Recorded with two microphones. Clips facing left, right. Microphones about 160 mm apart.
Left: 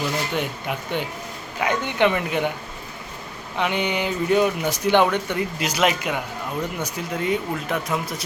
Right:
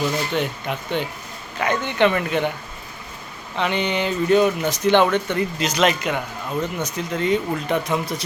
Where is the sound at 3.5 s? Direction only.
10° left (ahead or behind).